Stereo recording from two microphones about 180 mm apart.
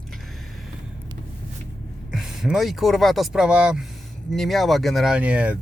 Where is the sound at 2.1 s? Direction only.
5° right (ahead or behind).